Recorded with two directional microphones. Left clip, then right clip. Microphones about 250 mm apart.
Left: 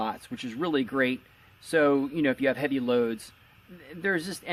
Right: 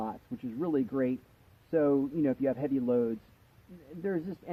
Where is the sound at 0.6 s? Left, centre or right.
Centre.